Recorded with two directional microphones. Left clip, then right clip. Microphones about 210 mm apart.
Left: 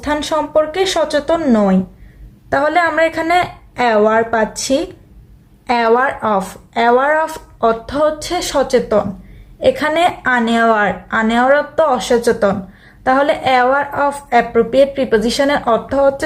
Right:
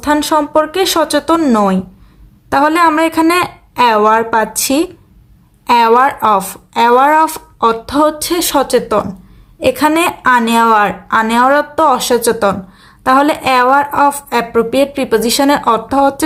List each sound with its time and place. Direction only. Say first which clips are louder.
0.0 s a woman's voice: right 5 dB; 45° right (ahead or behind)